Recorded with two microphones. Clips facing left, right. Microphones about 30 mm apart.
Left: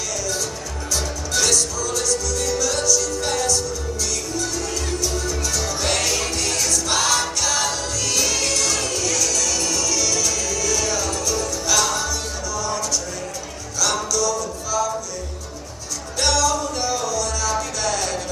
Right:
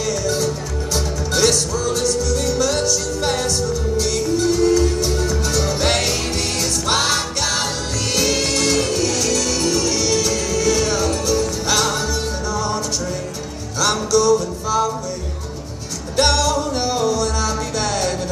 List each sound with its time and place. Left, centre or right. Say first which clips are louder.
0.2 s music: right 6 dB; right
16.2 s music: right 3 dB; right